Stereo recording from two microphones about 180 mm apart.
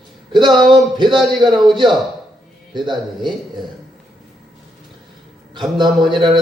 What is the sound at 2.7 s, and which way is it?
Speech, 25° right (ahead or behind).